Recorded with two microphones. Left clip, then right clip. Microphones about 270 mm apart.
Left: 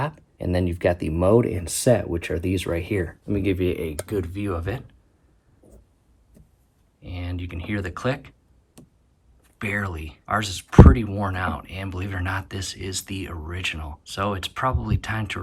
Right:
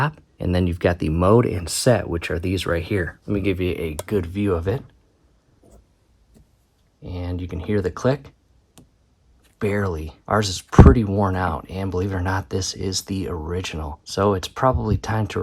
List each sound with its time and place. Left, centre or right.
0.0 s speech: right
7.0 s speech: centre
9.6 s speech: centre